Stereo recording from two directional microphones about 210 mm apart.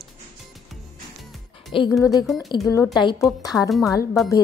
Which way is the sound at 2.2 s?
Centre (ahead or behind).